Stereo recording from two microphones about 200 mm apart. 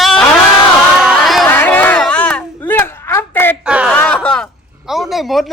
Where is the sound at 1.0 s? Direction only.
Centre (ahead or behind).